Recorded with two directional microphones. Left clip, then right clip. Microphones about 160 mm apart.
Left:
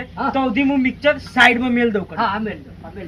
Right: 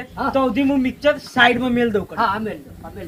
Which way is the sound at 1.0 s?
5° right (ahead or behind).